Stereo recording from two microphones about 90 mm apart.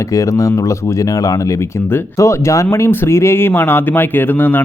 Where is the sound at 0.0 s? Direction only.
35° left (ahead or behind).